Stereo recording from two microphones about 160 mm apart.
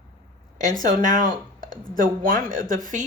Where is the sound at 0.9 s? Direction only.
55° right (ahead or behind).